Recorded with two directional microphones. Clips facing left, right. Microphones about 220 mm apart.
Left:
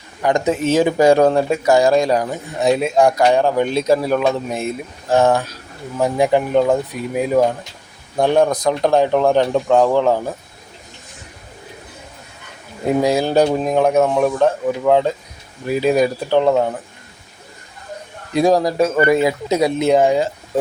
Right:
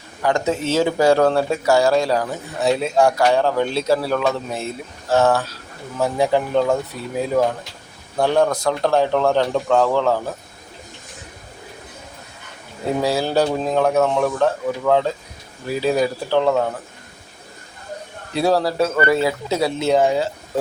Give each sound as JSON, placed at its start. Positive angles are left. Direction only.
{"t": 0.2, "sound": "speech", "side_deg": 15}
{"t": 13.0, "sound": "speech", "side_deg": 15}
{"t": 18.3, "sound": "speech", "side_deg": 15}